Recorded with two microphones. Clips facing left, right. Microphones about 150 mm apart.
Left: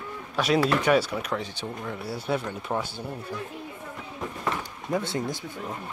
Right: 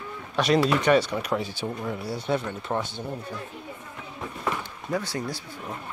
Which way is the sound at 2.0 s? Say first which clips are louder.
Even; 5° left (ahead or behind).